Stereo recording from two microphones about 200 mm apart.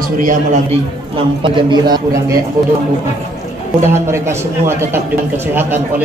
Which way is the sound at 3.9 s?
10° right (ahead or behind).